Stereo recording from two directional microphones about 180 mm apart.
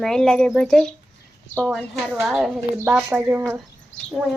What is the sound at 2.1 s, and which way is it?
Speech, 5° right (ahead or behind).